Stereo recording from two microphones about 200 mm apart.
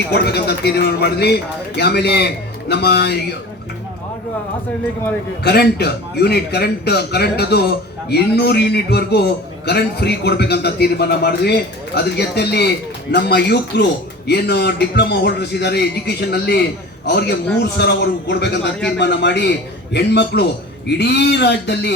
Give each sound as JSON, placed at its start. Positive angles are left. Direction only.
{"t": 0.1, "sound": "a man's voice", "side_deg": 55}
{"t": 5.4, "sound": "a man's voice", "side_deg": 55}